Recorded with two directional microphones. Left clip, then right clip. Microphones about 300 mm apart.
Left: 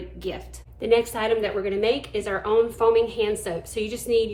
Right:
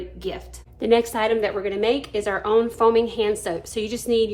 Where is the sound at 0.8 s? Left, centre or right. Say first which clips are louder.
Right 2 dB; right.